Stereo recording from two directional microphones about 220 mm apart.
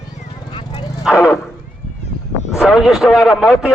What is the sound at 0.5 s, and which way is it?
Bow-wow, 20° left (ahead or behind).